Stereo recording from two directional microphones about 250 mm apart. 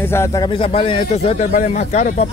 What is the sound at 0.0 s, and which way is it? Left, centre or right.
A man's voice, centre.